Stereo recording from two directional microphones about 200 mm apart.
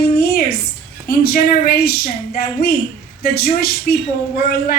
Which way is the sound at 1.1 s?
50° left (ahead or behind).